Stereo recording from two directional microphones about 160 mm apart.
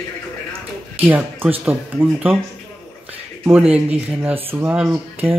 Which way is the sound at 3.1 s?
15° right (ahead or behind).